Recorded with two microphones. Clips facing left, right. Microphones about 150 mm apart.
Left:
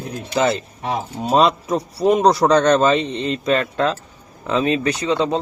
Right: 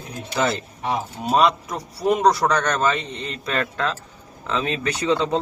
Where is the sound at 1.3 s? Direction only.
25° left (ahead or behind).